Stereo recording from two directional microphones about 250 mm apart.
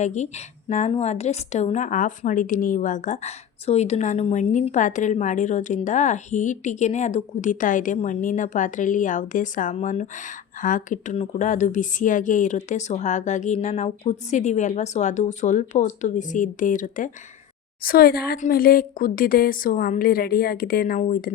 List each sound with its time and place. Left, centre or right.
0.0 s a woman's voice: left